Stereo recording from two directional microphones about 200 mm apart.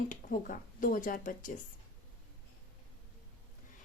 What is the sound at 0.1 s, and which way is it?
Speech, 45° left (ahead or behind).